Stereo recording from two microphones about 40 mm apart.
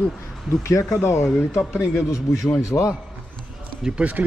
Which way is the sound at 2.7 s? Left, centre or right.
Left.